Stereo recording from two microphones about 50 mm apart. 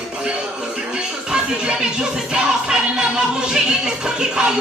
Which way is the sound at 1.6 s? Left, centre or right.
Centre.